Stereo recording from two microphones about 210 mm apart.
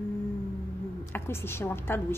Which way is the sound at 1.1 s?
10° left (ahead or behind).